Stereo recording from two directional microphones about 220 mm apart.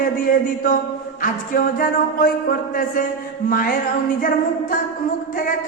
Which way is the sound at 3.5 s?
40° left (ahead or behind).